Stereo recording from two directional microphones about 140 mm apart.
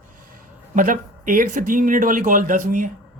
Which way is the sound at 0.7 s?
75° right (ahead or behind).